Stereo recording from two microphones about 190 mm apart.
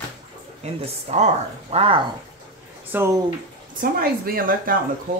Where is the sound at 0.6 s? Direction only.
35° right (ahead or behind).